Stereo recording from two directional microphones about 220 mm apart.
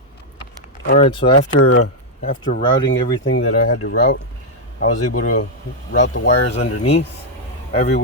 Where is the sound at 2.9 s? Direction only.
65° left (ahead or behind).